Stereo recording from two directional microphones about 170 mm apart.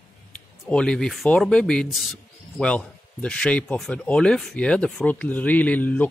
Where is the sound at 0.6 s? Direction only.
5° left (ahead or behind).